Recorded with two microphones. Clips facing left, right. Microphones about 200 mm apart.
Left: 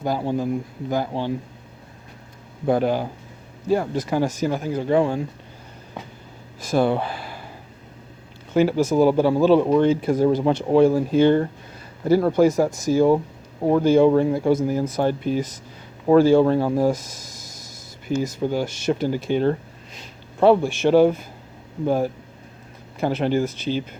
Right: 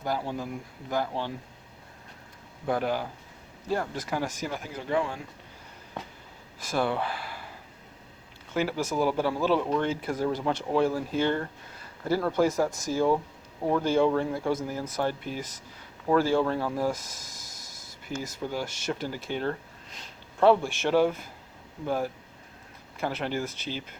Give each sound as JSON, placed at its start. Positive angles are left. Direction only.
{"t": 0.0, "sound": "speech", "side_deg": 20}
{"t": 2.6, "sound": "speech", "side_deg": 25}
{"t": 4.1, "sound": "speech", "side_deg": 25}
{"t": 6.6, "sound": "speech", "side_deg": 20}
{"t": 8.5, "sound": "speech", "side_deg": 20}